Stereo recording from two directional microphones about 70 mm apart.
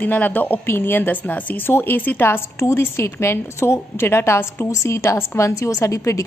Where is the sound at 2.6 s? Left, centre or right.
Left.